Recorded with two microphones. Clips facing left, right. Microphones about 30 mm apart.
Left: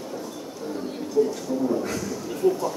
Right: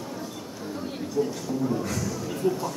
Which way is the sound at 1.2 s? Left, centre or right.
Centre.